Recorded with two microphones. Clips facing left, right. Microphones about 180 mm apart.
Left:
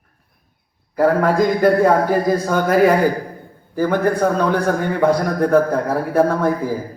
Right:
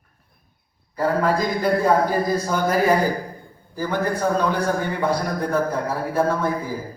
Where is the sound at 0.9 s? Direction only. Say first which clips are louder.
Left 5 dB; 55° left (ahead or behind).